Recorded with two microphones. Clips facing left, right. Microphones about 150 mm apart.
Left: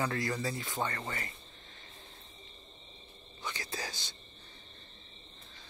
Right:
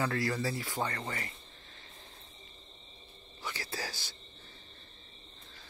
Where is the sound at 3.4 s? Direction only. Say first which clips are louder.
Even; 20° left (ahead or behind).